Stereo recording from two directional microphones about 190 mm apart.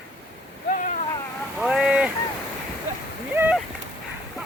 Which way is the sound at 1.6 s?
5° right (ahead or behind).